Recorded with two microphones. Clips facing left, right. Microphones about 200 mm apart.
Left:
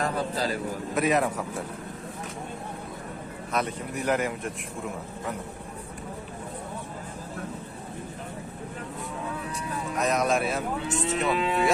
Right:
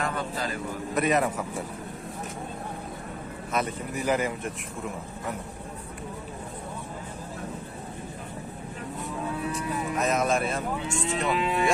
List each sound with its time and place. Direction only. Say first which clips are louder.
0.0 s a sound: left 3 dB; 35° left (ahead or behind)
0.9 s moo: even; centre (ahead or behind)
3.5 s moo: even; centre (ahead or behind)
9.9 s moo: left 1 dB; centre (ahead or behind)